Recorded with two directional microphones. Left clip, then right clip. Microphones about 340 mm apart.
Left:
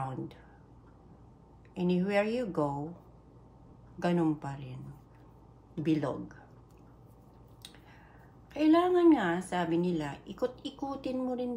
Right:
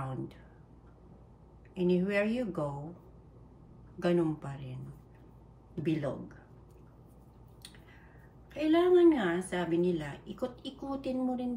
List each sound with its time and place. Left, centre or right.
1.8 s a woman's voice: centre
4.0 s a woman's voice: centre
5.8 s a woman's voice: centre
8.6 s a woman's voice: centre